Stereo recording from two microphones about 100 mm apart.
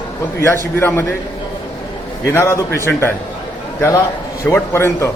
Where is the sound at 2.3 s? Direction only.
25° left (ahead or behind).